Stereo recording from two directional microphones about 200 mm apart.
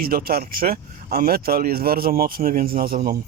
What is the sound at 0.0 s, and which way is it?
Speech, 50° right (ahead or behind).